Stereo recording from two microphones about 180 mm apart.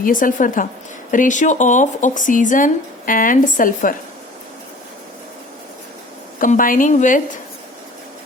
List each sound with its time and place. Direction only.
0.0 s speech: 50° left (ahead or behind)
6.4 s speech: 50° left (ahead or behind)